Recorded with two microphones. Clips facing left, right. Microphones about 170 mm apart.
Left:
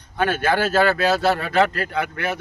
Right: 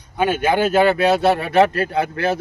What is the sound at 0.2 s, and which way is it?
Speech, 15° right (ahead or behind).